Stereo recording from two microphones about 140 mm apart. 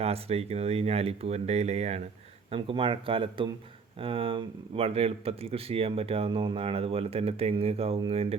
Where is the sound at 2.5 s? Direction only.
40° right (ahead or behind).